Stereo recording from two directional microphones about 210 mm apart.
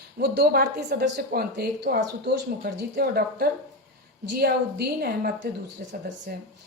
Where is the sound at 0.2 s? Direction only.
50° right (ahead or behind).